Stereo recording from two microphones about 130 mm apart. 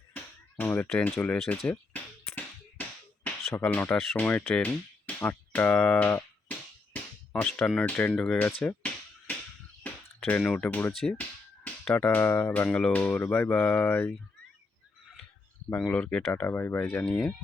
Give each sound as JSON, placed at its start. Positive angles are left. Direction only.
{"t": 0.6, "sound": "speech", "side_deg": 15}
{"t": 1.2, "sound": "a sound", "side_deg": 10}
{"t": 3.5, "sound": "speech", "side_deg": 15}
{"t": 8.6, "sound": "music", "side_deg": 10}
{"t": 9.8, "sound": "a sound", "side_deg": 10}
{"t": 10.2, "sound": "speech", "side_deg": 10}
{"t": 12.6, "sound": "speech", "side_deg": 5}
{"t": 15.8, "sound": "speech", "side_deg": 10}